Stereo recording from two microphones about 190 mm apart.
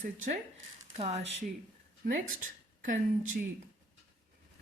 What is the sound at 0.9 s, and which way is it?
A woman's voice, 35° right (ahead or behind).